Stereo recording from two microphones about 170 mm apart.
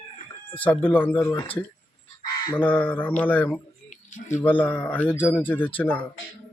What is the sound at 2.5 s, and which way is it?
Speech, 10° left (ahead or behind).